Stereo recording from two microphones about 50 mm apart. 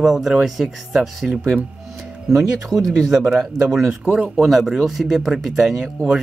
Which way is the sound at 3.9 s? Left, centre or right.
Centre.